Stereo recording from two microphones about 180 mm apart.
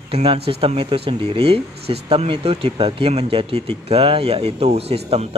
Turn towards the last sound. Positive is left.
turn(degrees=-35)  # may be behind; listen again after turning